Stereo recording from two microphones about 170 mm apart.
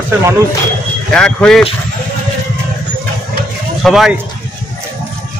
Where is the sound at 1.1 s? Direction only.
5° left (ahead or behind).